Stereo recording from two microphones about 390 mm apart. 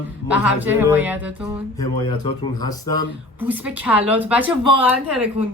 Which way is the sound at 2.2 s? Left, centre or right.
Centre.